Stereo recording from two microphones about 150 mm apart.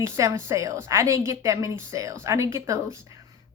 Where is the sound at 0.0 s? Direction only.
20° right (ahead or behind).